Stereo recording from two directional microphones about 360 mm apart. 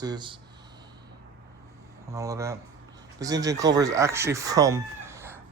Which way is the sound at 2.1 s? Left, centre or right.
Centre.